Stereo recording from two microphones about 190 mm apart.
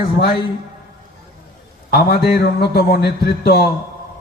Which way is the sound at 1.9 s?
55° left (ahead or behind).